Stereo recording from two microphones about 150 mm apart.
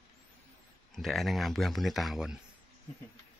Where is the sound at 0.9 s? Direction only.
Centre (ahead or behind).